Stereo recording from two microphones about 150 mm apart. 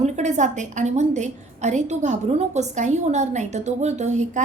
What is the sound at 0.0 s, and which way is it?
A woman's voice, 50° right (ahead or behind).